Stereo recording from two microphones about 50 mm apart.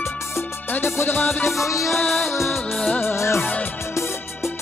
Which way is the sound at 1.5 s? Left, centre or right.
Left.